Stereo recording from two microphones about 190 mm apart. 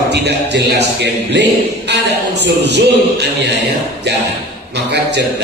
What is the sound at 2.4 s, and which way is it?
Speech, 60° right (ahead or behind).